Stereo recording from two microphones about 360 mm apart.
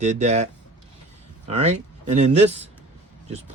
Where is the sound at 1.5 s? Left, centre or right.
Centre.